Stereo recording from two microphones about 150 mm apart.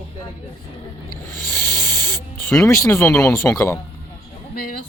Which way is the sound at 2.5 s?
20° left (ahead or behind).